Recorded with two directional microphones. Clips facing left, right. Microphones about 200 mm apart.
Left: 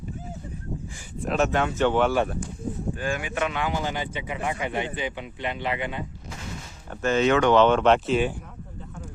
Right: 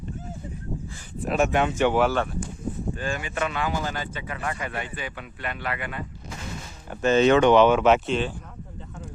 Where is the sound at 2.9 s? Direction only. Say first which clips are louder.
Left 1 dB; 10° left (ahead or behind).